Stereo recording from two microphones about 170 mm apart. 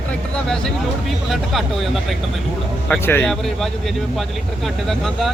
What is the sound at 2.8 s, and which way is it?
Speech, 10° left (ahead or behind).